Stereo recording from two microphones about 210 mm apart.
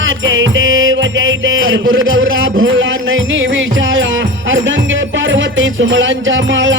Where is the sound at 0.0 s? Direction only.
65° right (ahead or behind).